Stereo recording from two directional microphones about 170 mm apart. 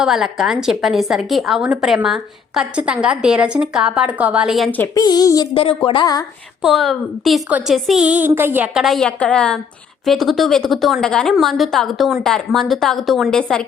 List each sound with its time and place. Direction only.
0.0 s a woman's voice: centre (ahead or behind)
4.8 s speech: 20° left (ahead or behind)
6.6 s a woman's voice: centre (ahead or behind)